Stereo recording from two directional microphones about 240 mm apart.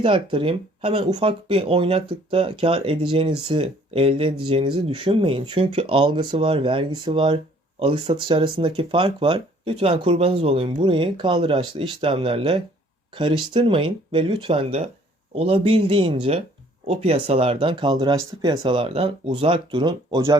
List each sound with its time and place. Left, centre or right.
0.0 s speech: right